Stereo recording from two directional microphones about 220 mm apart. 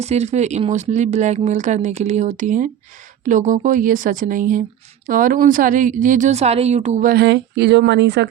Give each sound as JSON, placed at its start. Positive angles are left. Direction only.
{"t": 0.0, "sound": "speech", "side_deg": -30}